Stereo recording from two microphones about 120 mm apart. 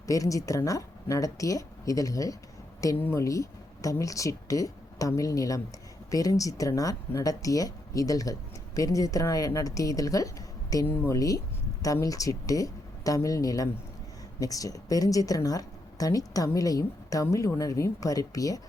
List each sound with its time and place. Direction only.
0.1 s speech: 30° left (ahead or behind)